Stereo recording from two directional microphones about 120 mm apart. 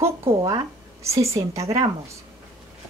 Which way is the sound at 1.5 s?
60° right (ahead or behind).